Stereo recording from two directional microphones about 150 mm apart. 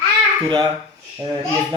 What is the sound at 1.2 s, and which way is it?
Speech, 35° right (ahead or behind).